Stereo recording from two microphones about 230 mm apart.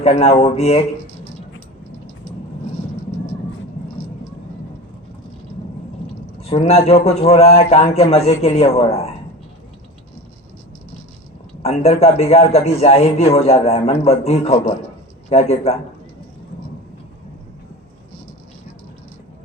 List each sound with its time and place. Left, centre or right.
0.0 s a man's voice: left
6.4 s a man's voice: left
11.6 s a man's voice: left